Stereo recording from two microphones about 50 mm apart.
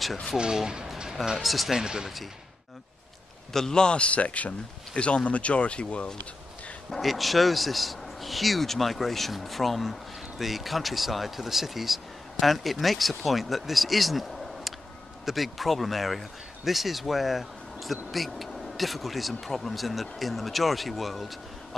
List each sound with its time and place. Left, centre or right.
0.4 s speech: centre
3.5 s a man's voice: centre
6.9 s speech: centre